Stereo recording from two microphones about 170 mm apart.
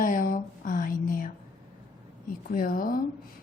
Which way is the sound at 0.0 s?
55° left (ahead or behind).